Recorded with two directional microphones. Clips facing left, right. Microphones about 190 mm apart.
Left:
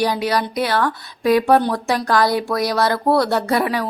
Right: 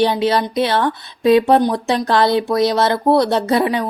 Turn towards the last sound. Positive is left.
turn(degrees=-20)  # may be behind; listen again after turning